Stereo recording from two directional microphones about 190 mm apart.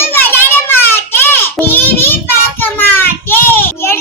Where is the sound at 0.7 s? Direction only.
10° left (ahead or behind).